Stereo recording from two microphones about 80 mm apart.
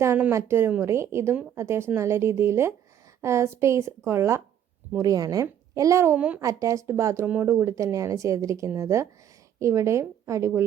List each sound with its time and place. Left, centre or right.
0.3 s speech: right
5.0 s a woman's voice: right
6.1 s speech: centre
6.4 s speech: right